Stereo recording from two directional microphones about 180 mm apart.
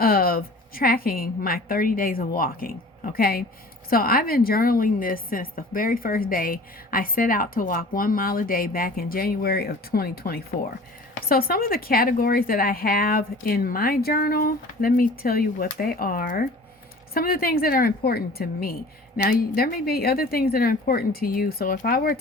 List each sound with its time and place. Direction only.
0.0 s a woman's voice: 55° left (ahead or behind)